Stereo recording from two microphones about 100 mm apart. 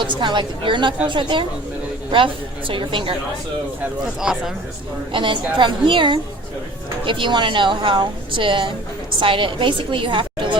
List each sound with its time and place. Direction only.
0.0 s a woman's voice: 50° right (ahead or behind)
4.2 s speech: 5° right (ahead or behind)
5.1 s a woman's voice: 55° right (ahead or behind)